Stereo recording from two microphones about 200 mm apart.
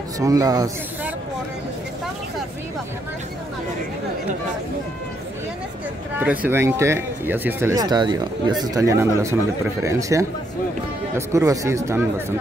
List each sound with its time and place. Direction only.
0.2 s speech: 15° right (ahead or behind)
6.1 s speech: 10° right (ahead or behind)